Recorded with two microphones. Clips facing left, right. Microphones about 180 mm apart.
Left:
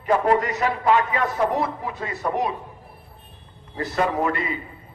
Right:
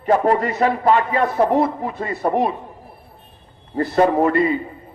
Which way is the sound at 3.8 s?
40° right (ahead or behind).